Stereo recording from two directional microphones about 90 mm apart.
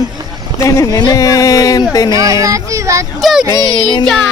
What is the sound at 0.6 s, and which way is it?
Speech, 35° left (ahead or behind).